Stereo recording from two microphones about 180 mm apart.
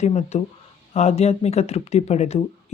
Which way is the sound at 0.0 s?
35° left (ahead or behind).